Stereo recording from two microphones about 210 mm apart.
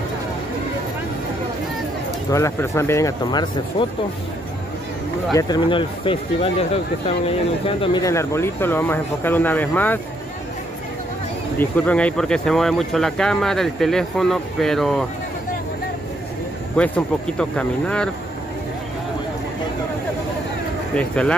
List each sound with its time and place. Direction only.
2.3 s speech: 15° left (ahead or behind)
5.3 s speech: 20° left (ahead or behind)
11.5 s speech: 10° left (ahead or behind)
16.7 s speech: 5° left (ahead or behind)
20.9 s speech: 5° left (ahead or behind)